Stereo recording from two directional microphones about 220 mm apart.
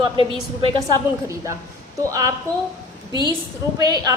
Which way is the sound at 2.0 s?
15° right (ahead or behind).